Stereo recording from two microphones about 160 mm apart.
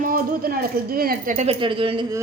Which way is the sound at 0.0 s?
60° right (ahead or behind).